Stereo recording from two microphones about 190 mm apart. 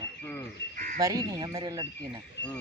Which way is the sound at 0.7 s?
45° right (ahead or behind).